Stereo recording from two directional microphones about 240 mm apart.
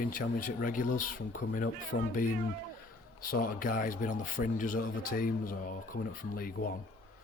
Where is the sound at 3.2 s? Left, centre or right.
Left.